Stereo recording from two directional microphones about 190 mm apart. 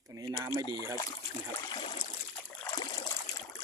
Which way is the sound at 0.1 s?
15° right (ahead or behind).